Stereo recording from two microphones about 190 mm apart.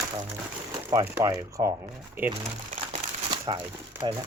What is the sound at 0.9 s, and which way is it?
Speech, 15° right (ahead or behind).